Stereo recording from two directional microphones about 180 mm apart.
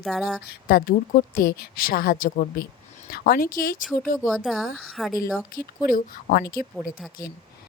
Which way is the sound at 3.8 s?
Centre (ahead or behind).